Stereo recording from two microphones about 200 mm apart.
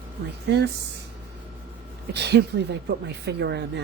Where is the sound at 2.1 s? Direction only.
55° right (ahead or behind).